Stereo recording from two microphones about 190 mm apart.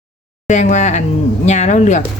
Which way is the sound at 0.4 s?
40° left (ahead or behind).